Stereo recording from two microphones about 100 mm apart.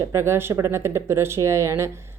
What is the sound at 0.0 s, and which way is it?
Speech, 25° right (ahead or behind).